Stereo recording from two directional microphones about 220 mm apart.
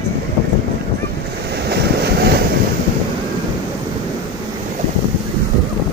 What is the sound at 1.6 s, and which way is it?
Vehicle, 50° right (ahead or behind).